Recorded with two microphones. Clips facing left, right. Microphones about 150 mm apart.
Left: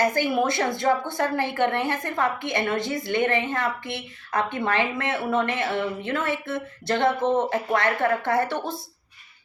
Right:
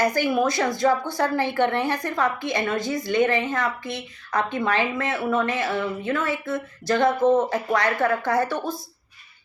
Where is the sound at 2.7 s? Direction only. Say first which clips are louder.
Right 1 dB; 25° left (ahead or behind).